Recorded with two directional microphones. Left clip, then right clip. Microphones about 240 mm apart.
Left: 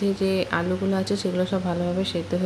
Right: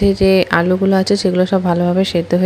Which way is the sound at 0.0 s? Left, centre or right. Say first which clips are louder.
Right 11 dB; right.